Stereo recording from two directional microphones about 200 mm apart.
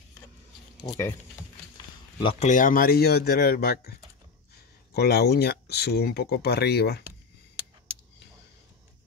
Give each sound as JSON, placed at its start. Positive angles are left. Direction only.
{"t": 2.1, "sound": "speech", "side_deg": 30}
{"t": 4.9, "sound": "speech", "side_deg": 55}